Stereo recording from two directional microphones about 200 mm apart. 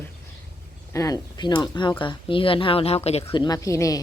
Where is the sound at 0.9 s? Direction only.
20° left (ahead or behind).